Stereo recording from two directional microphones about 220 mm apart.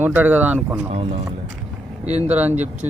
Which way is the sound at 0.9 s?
30° right (ahead or behind).